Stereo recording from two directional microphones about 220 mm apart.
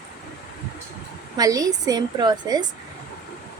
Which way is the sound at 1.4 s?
15° right (ahead or behind).